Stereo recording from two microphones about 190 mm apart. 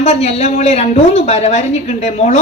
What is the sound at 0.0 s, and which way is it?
A woman's voice, 35° left (ahead or behind).